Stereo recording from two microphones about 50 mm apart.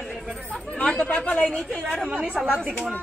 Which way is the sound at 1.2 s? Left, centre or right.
Left.